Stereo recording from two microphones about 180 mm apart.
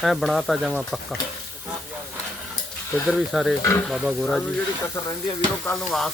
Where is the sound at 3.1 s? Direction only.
Centre (ahead or behind).